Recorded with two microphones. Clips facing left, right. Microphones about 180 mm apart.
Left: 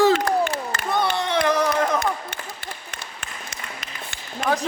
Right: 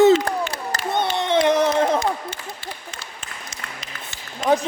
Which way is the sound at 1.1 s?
20° right (ahead or behind).